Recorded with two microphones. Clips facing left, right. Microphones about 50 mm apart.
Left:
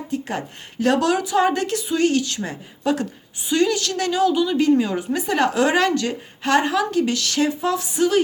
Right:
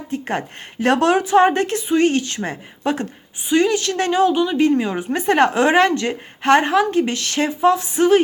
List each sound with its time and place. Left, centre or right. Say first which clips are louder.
0.1 s a sound: right 3 dB; right
0.9 s a woman's voice: right 3 dB; right
5.1 s a woman's voice: right 5 dB; right